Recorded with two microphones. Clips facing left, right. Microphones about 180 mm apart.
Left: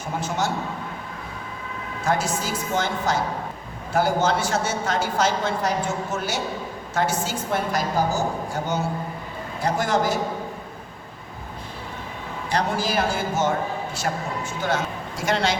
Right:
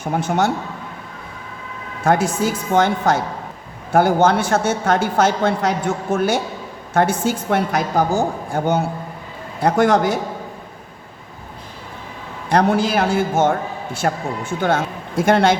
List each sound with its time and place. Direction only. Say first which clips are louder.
0.0 s a man's voice: right 7 dB; 60° right (ahead or behind)
2.0 s a man's voice: right 7 dB; 55° right (ahead or behind)
12.5 s a man's voice: right 8 dB; 60° right (ahead or behind)